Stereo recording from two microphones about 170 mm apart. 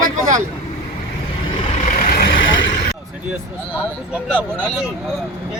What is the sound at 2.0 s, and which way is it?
Vehicle, 55° left (ahead or behind).